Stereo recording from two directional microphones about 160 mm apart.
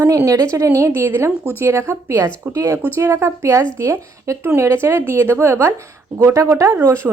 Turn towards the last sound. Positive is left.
turn(degrees=-15)  # may be behind; listen again after turning